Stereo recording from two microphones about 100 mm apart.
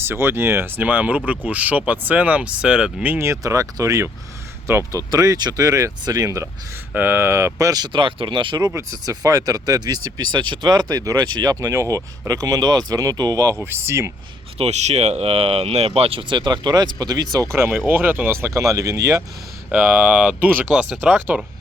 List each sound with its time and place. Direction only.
0.0 s speech: 25° right (ahead or behind)
6.9 s speech: 20° right (ahead or behind); by 7.9 s 35° right (ahead or behind)
7.9 s speech: 55° right (ahead or behind)
8.7 s speech: 35° right (ahead or behind)
14.6 s speech: 90° right; by 16.4 s 70° right (ahead or behind)
16.4 s speech: 45° right (ahead or behind)
17.5 s speech: 25° right (ahead or behind)
19.7 s speech: 15° right (ahead or behind)